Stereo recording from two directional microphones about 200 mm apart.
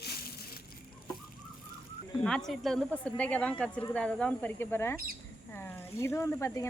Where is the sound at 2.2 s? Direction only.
5° left (ahead or behind).